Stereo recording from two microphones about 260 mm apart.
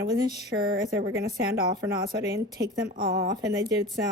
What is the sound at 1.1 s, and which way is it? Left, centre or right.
Speech, right.